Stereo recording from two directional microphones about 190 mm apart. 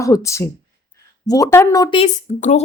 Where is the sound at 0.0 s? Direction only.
15° left (ahead or behind).